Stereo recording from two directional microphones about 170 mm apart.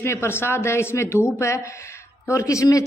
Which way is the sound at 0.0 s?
15° left (ahead or behind).